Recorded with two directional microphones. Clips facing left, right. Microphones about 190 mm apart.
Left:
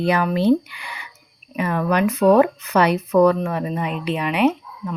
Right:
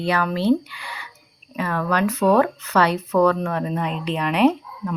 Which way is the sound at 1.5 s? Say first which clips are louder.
Left 3 dB; 15° left (ahead or behind).